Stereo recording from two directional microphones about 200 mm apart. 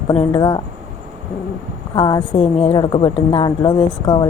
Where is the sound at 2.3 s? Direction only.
35° left (ahead or behind).